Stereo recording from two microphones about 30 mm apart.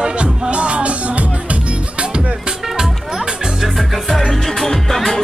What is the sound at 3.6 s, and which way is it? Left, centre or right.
Music, centre.